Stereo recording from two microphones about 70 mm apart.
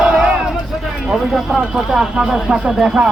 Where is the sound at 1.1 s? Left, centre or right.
Centre.